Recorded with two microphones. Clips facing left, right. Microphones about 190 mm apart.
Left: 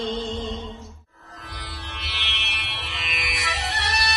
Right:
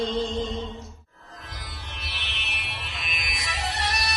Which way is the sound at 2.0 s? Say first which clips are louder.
Left 3 dB; 70° left (ahead or behind).